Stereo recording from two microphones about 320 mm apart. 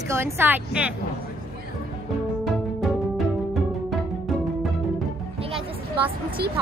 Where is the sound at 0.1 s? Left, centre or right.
Centre.